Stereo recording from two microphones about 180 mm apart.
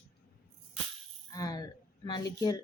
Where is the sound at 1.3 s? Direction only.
20° left (ahead or behind).